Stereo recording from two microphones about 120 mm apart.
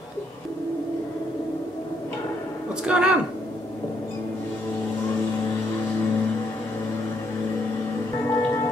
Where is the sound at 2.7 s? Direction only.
5° right (ahead or behind).